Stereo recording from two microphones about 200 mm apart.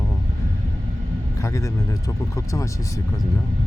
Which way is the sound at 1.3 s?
15° left (ahead or behind).